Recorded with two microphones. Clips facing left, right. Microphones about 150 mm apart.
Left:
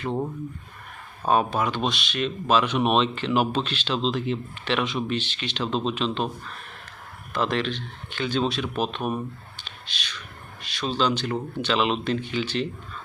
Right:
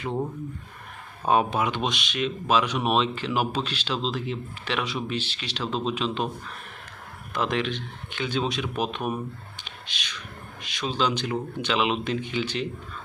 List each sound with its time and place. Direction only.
1.3 s speech: 20° right (ahead or behind)
7.3 s speech: 15° right (ahead or behind)
10.8 s speech: 15° right (ahead or behind)